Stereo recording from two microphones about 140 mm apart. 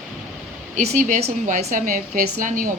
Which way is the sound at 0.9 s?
65° right (ahead or behind).